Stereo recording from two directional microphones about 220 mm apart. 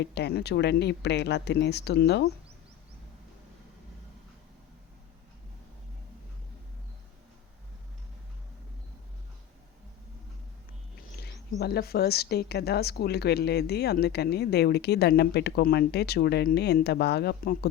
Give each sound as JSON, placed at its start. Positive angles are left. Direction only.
{"t": 0.0, "sound": "a woman's voice", "side_deg": 50}
{"t": 11.6, "sound": "a woman's voice", "side_deg": 45}